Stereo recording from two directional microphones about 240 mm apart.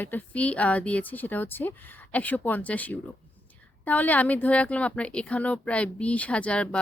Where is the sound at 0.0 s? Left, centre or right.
Centre.